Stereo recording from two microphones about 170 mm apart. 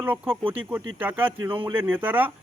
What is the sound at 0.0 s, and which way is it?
Speech, 10° right (ahead or behind).